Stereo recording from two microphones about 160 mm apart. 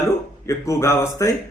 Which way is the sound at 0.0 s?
20° left (ahead or behind).